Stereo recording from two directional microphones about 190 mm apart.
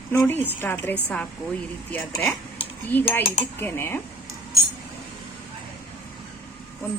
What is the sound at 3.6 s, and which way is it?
Speech, 10° left (ahead or behind).